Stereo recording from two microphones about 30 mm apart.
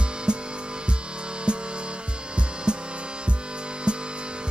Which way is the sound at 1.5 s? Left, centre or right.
Right.